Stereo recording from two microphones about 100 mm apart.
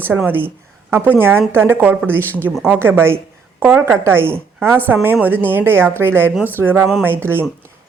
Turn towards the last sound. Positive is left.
turn(degrees=-20)  # may be behind; listen again after turning